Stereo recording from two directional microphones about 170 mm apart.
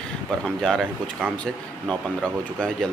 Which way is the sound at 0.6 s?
5° left (ahead or behind).